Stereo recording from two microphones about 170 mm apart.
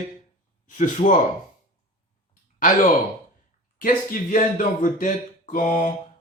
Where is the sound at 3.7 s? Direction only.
55° left (ahead or behind).